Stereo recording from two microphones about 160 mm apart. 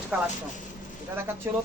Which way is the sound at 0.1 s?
5° right (ahead or behind).